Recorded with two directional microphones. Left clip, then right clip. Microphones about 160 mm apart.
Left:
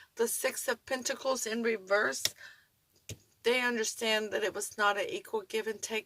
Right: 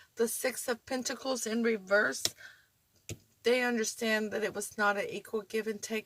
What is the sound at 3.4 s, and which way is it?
Speech, 50° left (ahead or behind).